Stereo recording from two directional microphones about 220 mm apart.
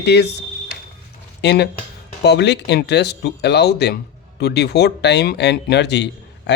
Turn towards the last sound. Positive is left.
turn(degrees=50)  # may be behind; listen again after turning